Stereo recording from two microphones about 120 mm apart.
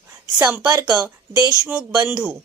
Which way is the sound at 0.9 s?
35° right (ahead or behind).